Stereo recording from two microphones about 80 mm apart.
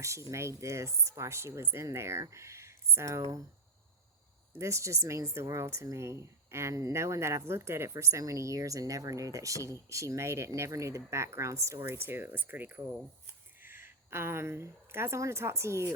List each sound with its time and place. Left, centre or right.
0.0 s a woman's voice: right
4.5 s a woman's voice: right